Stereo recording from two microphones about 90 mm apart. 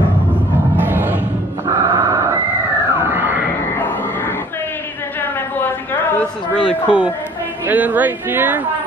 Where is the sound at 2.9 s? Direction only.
25° right (ahead or behind).